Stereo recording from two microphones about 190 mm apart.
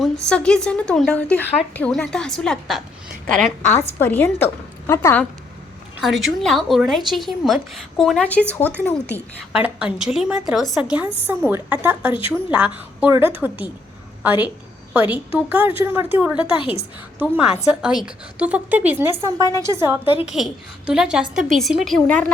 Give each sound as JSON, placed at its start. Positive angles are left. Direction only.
{"t": 0.3, "sound": "a woman's voice", "side_deg": 5}
{"t": 3.7, "sound": "a woman's voice", "side_deg": 15}
{"t": 6.0, "sound": "a woman's voice", "side_deg": 0}
{"t": 9.5, "sound": "a woman's voice", "side_deg": -5}
{"t": 16.5, "sound": "a woman's voice", "side_deg": 30}
{"t": 17.2, "sound": "a woman's voice", "side_deg": -5}
{"t": 20.2, "sound": "a woman's voice", "side_deg": -5}